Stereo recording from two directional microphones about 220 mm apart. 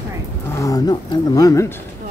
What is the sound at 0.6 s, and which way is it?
Speech, 15° left (ahead or behind).